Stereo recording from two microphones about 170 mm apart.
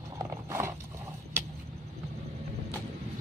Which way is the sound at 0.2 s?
15° right (ahead or behind).